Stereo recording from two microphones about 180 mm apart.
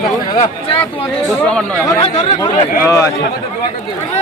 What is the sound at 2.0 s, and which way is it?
Speech, 40° left (ahead or behind).